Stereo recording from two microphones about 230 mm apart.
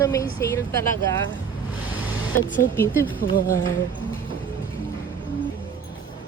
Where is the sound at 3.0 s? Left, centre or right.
Left.